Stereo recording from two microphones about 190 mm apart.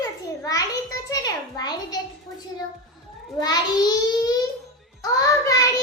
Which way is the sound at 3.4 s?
20° left (ahead or behind).